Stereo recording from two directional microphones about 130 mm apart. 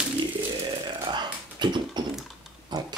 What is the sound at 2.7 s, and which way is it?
Pig, 35° right (ahead or behind).